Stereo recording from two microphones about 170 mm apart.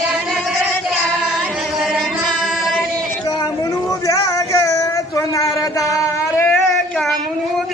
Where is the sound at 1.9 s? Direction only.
5° right (ahead or behind).